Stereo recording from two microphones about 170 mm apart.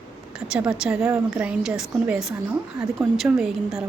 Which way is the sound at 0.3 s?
5° right (ahead or behind).